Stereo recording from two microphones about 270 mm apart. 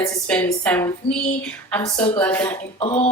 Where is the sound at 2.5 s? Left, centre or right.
Centre.